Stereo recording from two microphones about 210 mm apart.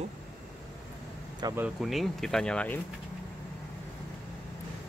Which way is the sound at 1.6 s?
Centre (ahead or behind).